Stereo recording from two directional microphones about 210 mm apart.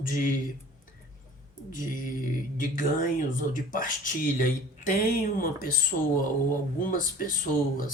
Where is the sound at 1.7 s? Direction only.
40° left (ahead or behind).